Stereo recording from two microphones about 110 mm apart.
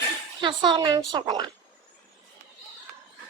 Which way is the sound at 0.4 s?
40° right (ahead or behind).